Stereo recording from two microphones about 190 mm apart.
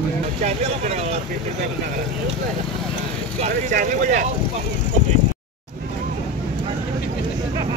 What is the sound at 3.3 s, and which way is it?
Vehicle, 40° right (ahead or behind).